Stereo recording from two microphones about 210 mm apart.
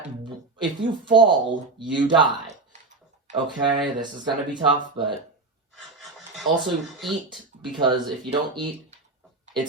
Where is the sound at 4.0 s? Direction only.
20° right (ahead or behind).